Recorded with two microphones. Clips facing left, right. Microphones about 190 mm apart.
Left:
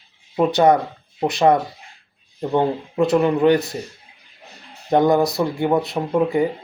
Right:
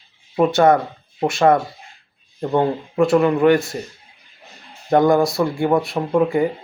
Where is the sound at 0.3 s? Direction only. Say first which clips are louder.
Right 1 dB; 20° left (ahead or behind).